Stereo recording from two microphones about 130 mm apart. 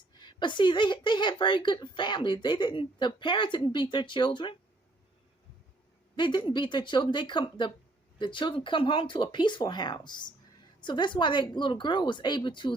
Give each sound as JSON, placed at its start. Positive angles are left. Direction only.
{"t": 0.2, "sound": "a woman's voice", "side_deg": 35}
{"t": 6.1, "sound": "a woman's voice", "side_deg": 35}